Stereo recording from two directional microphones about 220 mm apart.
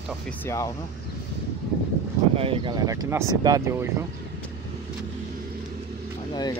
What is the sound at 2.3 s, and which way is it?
Speech, 25° right (ahead or behind).